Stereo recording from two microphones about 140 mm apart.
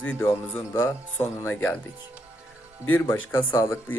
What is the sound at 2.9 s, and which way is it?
Speech, 15° left (ahead or behind).